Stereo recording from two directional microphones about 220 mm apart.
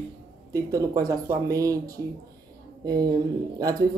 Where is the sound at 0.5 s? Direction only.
15° right (ahead or behind).